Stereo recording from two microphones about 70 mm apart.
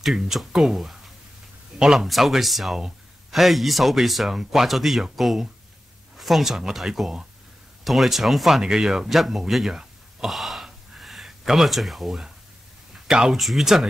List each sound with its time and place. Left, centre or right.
0.0 s speech: centre